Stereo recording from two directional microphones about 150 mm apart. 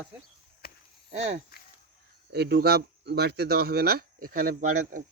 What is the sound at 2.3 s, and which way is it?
Speech, 90° right.